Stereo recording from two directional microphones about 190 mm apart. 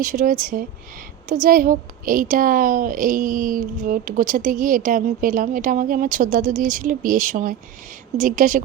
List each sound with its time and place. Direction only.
0.0 s a woman's voice: 45° right (ahead or behind)